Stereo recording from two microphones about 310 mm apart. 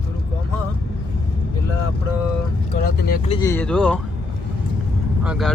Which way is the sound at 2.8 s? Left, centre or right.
Left.